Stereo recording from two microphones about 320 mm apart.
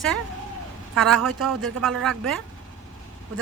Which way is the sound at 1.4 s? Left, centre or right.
Centre.